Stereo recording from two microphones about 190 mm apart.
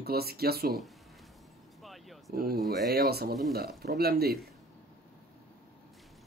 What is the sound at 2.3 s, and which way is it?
Speech, 55° right (ahead or behind).